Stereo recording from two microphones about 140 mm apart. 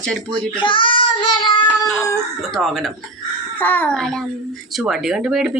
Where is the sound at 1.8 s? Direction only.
5° left (ahead or behind).